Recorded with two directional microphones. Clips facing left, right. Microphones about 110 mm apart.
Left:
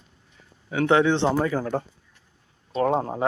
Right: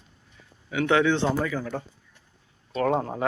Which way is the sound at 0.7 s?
30° left (ahead or behind).